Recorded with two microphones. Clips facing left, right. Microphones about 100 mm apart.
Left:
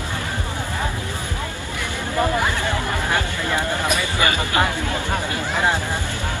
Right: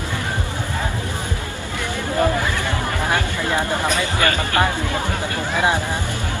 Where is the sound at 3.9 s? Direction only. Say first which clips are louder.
Right 1 dB; 15° left (ahead or behind).